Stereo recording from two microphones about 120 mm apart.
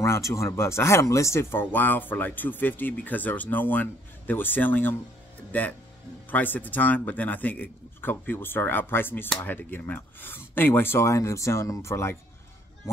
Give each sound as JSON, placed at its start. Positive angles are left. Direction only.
{"t": 0.0, "sound": "speech", "side_deg": 25}